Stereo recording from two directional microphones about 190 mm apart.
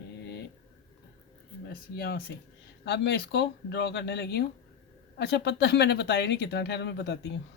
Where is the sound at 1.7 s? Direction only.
60° left (ahead or behind).